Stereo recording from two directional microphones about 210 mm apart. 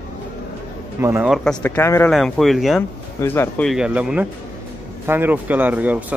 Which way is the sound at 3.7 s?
5° right (ahead or behind).